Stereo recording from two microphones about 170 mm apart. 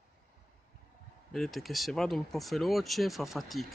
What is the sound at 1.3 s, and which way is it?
Speech, centre (ahead or behind).